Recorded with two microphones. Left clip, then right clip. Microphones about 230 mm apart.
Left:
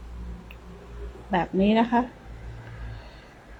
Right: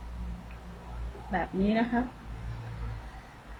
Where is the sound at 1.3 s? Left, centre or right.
Left.